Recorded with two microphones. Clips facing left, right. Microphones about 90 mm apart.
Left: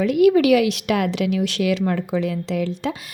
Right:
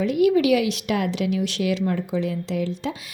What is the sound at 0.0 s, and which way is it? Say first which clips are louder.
Speech: left 3 dB; 65° left (ahead or behind).